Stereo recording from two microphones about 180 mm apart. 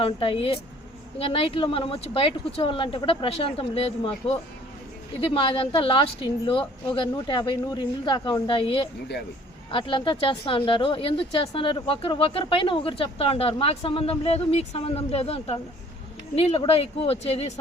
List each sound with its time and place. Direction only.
0.0 s speech: 30° left (ahead or behind)